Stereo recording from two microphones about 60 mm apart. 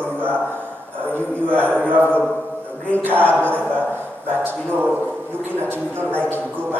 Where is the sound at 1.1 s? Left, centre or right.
Right.